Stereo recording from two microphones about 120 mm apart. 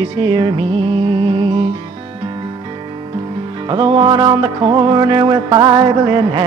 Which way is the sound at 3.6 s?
40° right (ahead or behind).